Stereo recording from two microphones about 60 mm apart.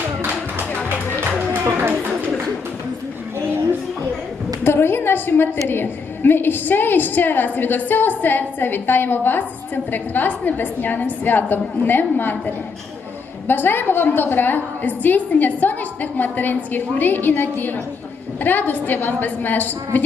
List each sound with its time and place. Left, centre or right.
4.6 s a woman's voice: left
13.5 s a woman's voice: left